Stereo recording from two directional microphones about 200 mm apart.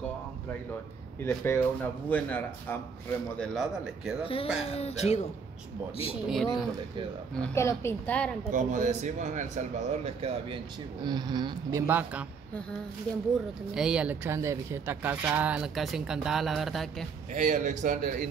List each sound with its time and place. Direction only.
1.2 s speech: 10° left (ahead or behind)
3.5 s speech: centre (ahead or behind)
4.2 s speech: 30° left (ahead or behind)
6.2 s speech: centre (ahead or behind)
8.5 s a man's voice: 40° right (ahead or behind); by 12.3 s 10° right (ahead or behind)
13.7 s speech: 5° right (ahead or behind)
17.3 s a man's voice: 35° right (ahead or behind)